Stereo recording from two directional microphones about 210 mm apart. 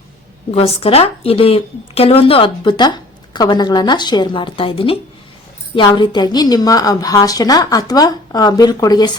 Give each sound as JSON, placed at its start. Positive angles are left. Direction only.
{"t": 0.5, "sound": "a woman's voice", "side_deg": 30}